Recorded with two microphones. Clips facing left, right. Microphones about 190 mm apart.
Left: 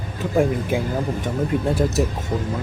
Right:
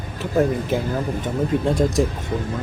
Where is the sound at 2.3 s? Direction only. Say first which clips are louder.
Even; 35° left (ahead or behind).